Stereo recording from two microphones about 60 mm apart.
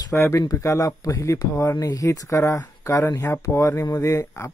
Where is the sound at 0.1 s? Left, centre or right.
Left.